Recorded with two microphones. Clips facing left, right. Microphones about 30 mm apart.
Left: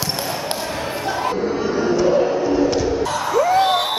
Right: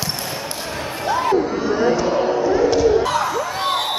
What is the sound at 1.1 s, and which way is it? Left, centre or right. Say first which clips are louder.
Crowd: right 6 dB; centre.